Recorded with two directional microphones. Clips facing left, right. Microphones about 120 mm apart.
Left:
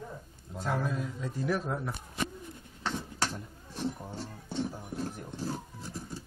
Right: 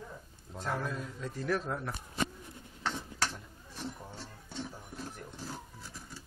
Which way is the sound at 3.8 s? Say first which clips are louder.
Left 7 dB; 20° left (ahead or behind).